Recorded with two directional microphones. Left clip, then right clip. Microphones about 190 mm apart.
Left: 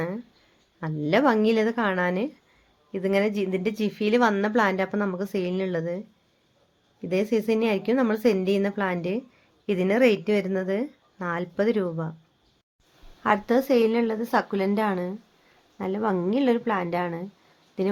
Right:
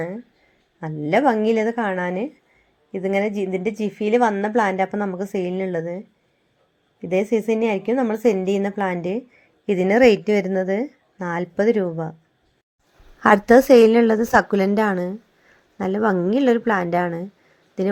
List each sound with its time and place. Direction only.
0.8 s a woman's voice: 10° right (ahead or behind)
7.0 s a woman's voice: 15° right (ahead or behind)
13.2 s a woman's voice: 45° right (ahead or behind); by 17.2 s 20° right (ahead or behind)